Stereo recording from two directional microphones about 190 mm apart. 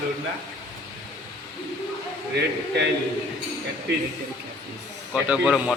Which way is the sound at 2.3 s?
65° right (ahead or behind).